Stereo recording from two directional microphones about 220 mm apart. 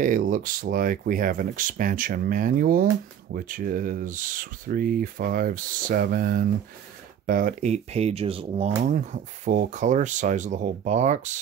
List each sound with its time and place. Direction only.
0.0 s speech: 40° right (ahead or behind)